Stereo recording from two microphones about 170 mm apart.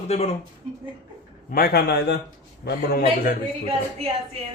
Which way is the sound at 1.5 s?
65° left (ahead or behind).